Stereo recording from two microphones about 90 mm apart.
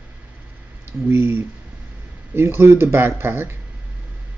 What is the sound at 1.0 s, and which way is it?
Speech, 25° right (ahead or behind).